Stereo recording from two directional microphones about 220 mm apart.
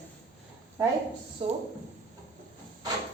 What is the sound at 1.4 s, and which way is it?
Speech, 25° right (ahead or behind).